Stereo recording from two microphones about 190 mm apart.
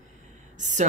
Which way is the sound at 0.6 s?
40° right (ahead or behind).